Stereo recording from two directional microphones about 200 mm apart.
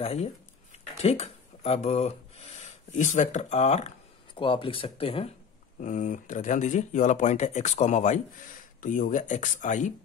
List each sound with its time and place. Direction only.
0.0 s speech: 30° left (ahead or behind)
5.8 s speech: 40° left (ahead or behind)